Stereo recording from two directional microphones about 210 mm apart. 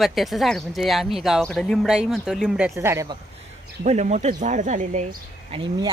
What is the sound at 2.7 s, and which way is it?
Speech, 15° right (ahead or behind).